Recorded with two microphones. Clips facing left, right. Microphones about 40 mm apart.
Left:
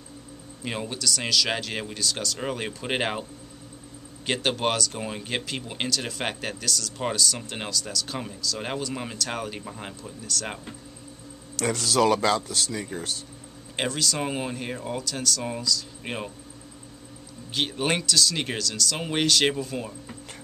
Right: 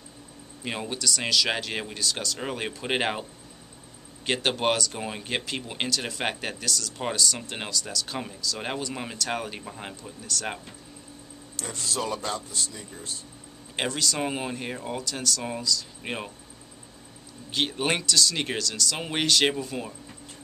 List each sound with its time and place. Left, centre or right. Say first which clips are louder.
0.7 s speech: even; centre
4.3 s speech: even; centre
11.5 s speech: left 8 dB; left
13.7 s speech: left 1 dB; centre
17.5 s speech: even; centre